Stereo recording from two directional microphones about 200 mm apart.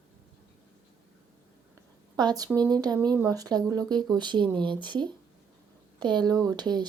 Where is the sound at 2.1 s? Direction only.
20° right (ahead or behind).